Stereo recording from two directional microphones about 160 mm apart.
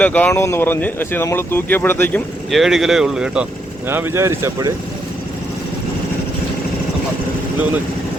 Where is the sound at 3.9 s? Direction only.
15° right (ahead or behind).